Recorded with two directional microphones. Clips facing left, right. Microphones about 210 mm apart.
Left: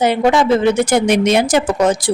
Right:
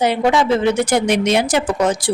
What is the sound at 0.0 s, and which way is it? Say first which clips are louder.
A woman's voice: left 2 dB; 50° left (ahead or behind).